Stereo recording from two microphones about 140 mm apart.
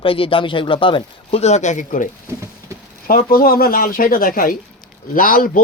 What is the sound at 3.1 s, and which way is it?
Speech, 90° left.